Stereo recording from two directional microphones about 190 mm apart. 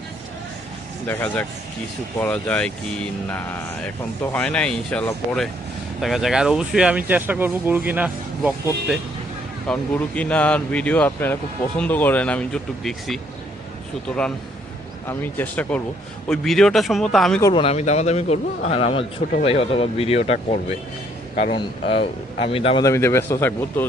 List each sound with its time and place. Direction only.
1.0 s speech: 10° left (ahead or behind); by 8.5 s 10° right (ahead or behind)
9.6 s speech: 5° left (ahead or behind)
15.0 s speech: 10° left (ahead or behind)
17.4 s a man's voice: 25° left (ahead or behind)
22.8 s speech: 15° left (ahead or behind)